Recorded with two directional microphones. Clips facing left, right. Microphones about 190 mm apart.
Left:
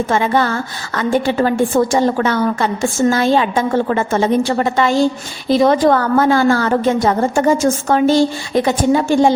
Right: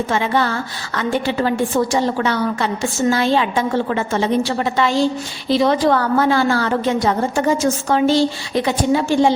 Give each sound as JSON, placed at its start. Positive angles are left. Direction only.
{"t": 0.1, "sound": "a woman's voice", "side_deg": 45}